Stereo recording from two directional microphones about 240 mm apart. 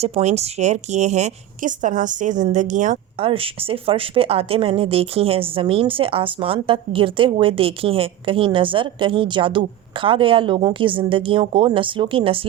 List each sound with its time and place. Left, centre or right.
0.0 s a woman's voice: right